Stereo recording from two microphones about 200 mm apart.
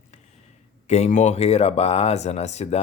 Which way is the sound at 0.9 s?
35° left (ahead or behind).